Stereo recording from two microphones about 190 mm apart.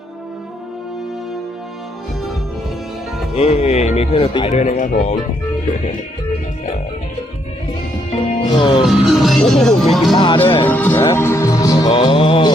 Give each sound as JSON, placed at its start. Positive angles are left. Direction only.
{"t": 3.3, "sound": "speech", "side_deg": 30}
{"t": 8.4, "sound": "music", "side_deg": 25}
{"t": 8.8, "sound": "speech", "side_deg": 0}
{"t": 10.2, "sound": "music", "side_deg": 25}
{"t": 10.7, "sound": "music", "side_deg": 10}